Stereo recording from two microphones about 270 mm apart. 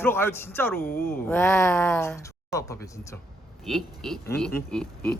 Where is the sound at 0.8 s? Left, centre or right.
Left.